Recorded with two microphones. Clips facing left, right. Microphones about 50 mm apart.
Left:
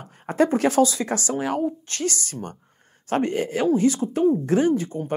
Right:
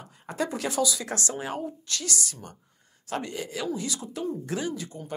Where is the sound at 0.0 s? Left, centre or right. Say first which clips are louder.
Left 10 dB; left.